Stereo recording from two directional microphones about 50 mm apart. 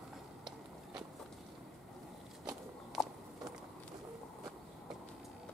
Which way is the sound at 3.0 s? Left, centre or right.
Centre.